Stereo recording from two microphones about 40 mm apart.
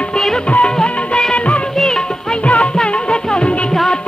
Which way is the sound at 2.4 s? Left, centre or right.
Left.